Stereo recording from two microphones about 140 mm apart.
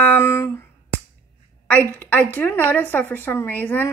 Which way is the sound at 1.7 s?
10° left (ahead or behind).